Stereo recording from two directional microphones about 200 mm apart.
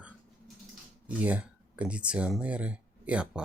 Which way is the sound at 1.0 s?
5° right (ahead or behind).